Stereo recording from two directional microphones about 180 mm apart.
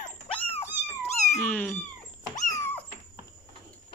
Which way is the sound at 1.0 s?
40° left (ahead or behind).